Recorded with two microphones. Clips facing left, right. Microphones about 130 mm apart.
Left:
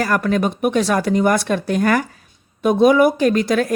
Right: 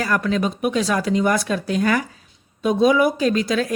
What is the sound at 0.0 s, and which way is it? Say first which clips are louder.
Speech: left 3 dB; 50° left (ahead or behind).